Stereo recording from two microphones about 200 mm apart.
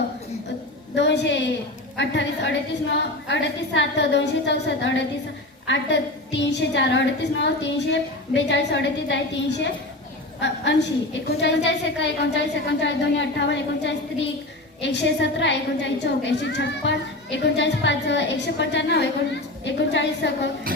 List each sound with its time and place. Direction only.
0.9 s a woman's voice: 60° left (ahead or behind)